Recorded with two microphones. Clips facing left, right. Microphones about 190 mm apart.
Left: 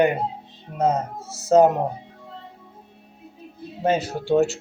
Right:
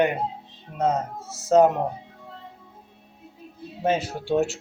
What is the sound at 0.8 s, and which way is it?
Speech, 20° left (ahead or behind).